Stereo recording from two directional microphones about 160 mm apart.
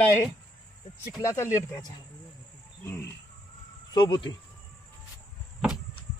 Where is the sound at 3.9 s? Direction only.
30° left (ahead or behind).